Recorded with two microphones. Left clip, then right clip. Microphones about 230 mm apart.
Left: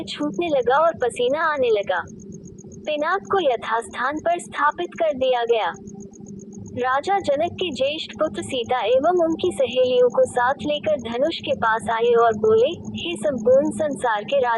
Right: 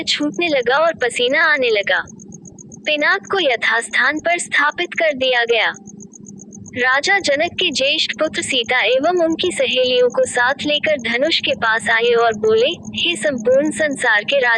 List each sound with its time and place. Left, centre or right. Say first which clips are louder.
0.0 s a woman's voice: right 7 dB; right
6.7 s a woman's voice: right 6 dB; right